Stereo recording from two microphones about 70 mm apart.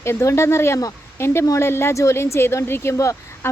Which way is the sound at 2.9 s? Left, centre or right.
Left.